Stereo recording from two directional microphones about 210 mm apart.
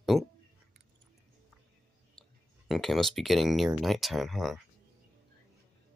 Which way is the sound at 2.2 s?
5° left (ahead or behind).